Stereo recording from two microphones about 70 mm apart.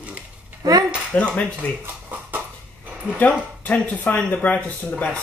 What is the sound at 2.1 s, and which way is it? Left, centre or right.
Dog, right.